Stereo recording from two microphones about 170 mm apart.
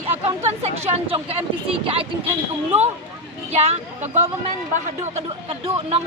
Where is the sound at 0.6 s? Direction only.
35° right (ahead or behind).